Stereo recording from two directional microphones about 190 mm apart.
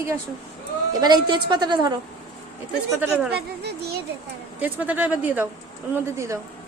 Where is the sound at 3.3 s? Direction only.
55° right (ahead or behind).